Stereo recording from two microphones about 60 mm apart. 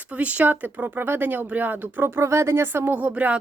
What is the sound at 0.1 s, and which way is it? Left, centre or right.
Speech, right.